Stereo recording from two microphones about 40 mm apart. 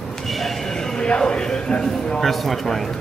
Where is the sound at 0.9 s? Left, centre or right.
Left.